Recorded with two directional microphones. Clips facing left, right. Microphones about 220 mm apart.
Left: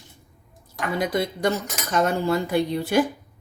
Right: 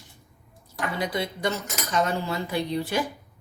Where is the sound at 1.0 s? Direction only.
45° left (ahead or behind).